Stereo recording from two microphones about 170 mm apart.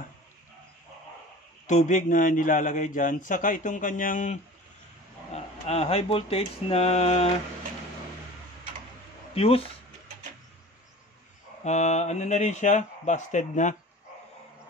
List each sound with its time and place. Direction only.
1.7 s a man's voice: 45° left (ahead or behind)
5.3 s speech: 35° left (ahead or behind)
9.3 s speech: 35° left (ahead or behind)
11.6 s a man's voice: 45° left (ahead or behind)